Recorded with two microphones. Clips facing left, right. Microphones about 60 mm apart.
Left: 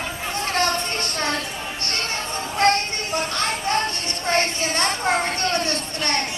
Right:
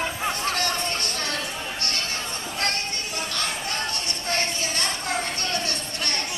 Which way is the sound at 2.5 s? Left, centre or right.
Left.